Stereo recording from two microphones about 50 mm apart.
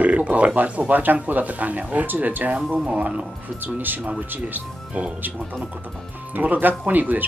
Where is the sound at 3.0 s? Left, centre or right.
Right.